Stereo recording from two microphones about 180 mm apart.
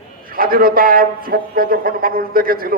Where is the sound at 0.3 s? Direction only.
55° right (ahead or behind).